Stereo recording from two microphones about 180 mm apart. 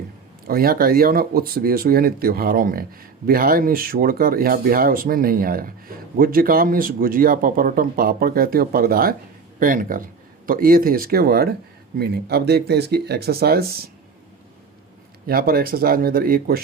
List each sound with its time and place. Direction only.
0.4 s speech: 55° right (ahead or behind)
15.3 s speech: 55° right (ahead or behind)